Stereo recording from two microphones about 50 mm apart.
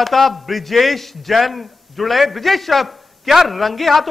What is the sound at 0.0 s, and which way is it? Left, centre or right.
Speech, centre.